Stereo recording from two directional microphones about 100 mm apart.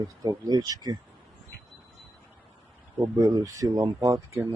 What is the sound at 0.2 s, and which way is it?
Speech, 40° right (ahead or behind).